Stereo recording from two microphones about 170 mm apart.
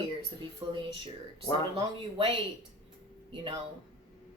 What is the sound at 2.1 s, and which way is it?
Speech, 35° right (ahead or behind).